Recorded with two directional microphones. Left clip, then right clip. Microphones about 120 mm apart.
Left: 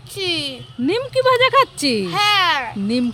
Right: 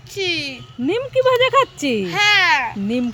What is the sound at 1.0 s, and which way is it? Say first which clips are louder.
Speech: even; 10° left (ahead or behind).